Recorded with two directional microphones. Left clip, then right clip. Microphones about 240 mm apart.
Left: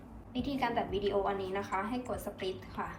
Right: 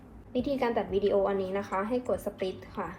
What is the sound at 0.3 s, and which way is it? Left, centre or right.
A woman's voice, right.